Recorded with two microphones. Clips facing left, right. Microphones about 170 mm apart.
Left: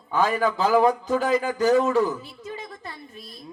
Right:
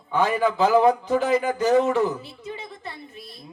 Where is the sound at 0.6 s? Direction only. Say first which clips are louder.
Right 2 dB; 20° right (ahead or behind).